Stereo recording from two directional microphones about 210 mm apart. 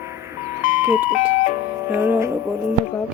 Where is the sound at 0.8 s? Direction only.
5° right (ahead or behind).